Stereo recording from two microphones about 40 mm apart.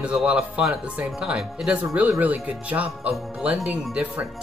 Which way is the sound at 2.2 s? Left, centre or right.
Right.